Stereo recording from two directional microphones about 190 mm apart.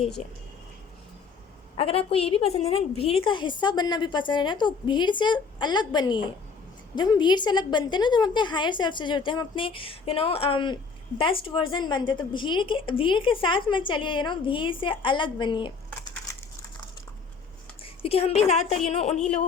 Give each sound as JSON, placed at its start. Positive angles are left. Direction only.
{"t": 1.7, "sound": "a woman's voice", "side_deg": 30}
{"t": 17.8, "sound": "a woman's voice", "side_deg": 30}